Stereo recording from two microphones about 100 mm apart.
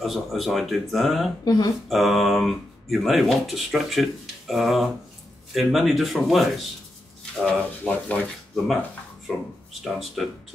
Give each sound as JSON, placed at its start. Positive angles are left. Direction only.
{"t": 0.0, "sound": "speech", "side_deg": 0}
{"t": 1.4, "sound": "speech", "side_deg": 40}
{"t": 1.9, "sound": "speech", "side_deg": 0}
{"t": 7.4, "sound": "speech", "side_deg": 15}
{"t": 9.3, "sound": "speech", "side_deg": 0}